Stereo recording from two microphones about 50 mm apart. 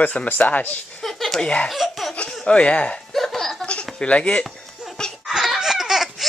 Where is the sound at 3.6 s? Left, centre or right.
Left.